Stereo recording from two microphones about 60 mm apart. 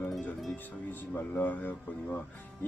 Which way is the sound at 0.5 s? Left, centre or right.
Left.